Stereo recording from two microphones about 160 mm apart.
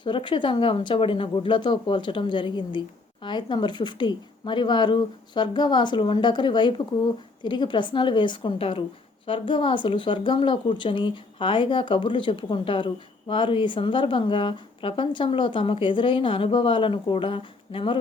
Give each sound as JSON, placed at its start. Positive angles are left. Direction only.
{"t": 0.0, "sound": "speech", "side_deg": 30}